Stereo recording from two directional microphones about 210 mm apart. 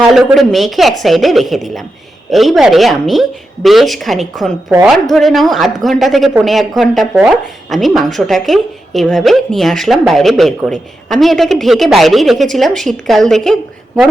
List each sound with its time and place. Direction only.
0.1 s a woman's voice: centre (ahead or behind)